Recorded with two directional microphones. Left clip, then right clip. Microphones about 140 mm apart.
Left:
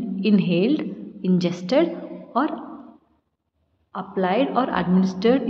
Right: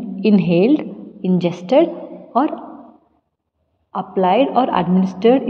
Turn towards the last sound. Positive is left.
turn(degrees=-25)  # may be behind; listen again after turning